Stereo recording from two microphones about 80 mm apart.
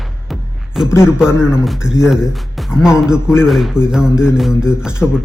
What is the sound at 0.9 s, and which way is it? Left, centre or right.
Speech, left.